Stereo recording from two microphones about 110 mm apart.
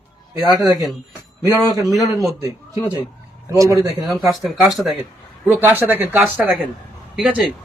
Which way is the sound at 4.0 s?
Centre (ahead or behind).